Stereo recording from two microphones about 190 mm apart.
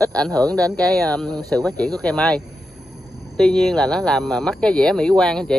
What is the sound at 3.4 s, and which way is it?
Speech, 5° left (ahead or behind).